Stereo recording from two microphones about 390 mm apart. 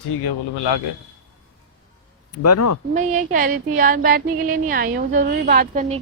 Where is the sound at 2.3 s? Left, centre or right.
Left.